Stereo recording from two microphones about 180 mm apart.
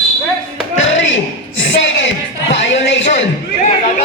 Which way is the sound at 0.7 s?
90° left.